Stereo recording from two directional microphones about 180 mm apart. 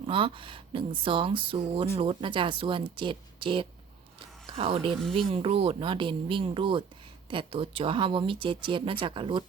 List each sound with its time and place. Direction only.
0.0 s speech: 30° right (ahead or behind)
4.9 s speech: centre (ahead or behind)
5.1 s speech: 30° right (ahead or behind)